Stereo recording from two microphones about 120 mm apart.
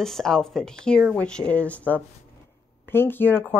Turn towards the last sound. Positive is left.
turn(degrees=15)  # may be behind; listen again after turning